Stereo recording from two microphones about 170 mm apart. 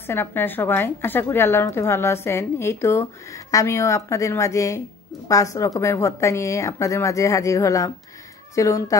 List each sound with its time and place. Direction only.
0.0 s a woman's voice: 15° left (ahead or behind)